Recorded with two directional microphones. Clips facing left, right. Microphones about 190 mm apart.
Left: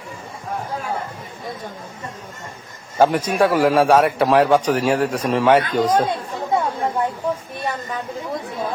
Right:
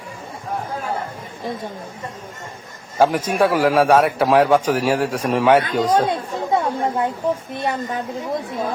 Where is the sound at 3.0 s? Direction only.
Centre (ahead or behind).